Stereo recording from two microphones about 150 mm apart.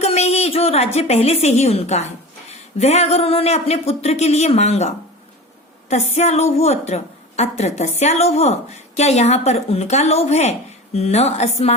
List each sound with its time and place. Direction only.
0.0 s a woman's voice: 45° left (ahead or behind)